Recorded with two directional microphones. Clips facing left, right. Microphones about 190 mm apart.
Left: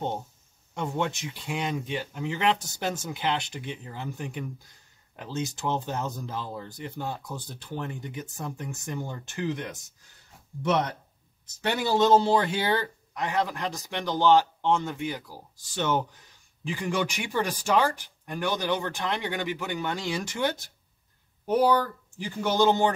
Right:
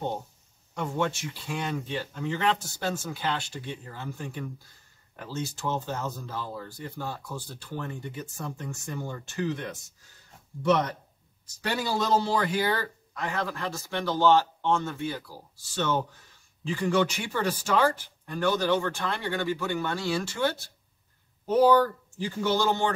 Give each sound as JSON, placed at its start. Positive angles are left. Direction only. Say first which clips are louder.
{"t": 0.7, "sound": "a man's voice", "louder": "even", "side_deg": 20}
{"t": 11.9, "sound": "a man's voice", "louder": "left 6 dB", "side_deg": 25}
{"t": 22.2, "sound": "a man's voice", "louder": "left 2 dB", "side_deg": 15}